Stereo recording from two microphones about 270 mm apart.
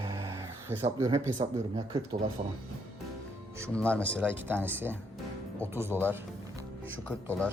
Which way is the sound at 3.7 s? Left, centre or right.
Centre.